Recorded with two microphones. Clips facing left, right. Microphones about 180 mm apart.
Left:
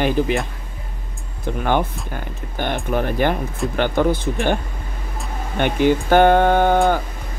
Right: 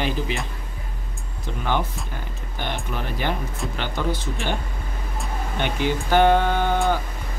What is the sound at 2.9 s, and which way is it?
Speech, 50° left (ahead or behind).